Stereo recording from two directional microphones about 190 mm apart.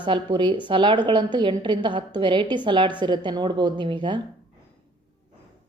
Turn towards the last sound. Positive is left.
turn(degrees=-25)  # may be behind; listen again after turning